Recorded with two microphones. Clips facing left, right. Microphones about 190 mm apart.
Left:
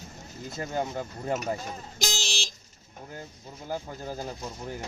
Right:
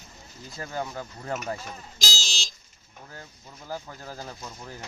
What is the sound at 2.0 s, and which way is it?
Vehicle, 60° left (ahead or behind).